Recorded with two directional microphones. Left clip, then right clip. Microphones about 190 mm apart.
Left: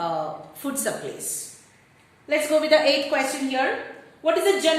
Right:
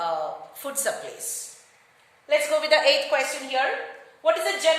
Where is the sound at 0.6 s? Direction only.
20° right (ahead or behind).